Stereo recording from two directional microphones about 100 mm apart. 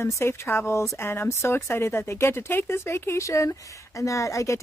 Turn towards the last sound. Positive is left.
turn(degrees=30)  # may be behind; listen again after turning